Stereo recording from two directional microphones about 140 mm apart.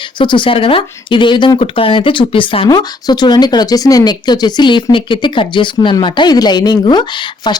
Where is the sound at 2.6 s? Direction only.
30° left (ahead or behind).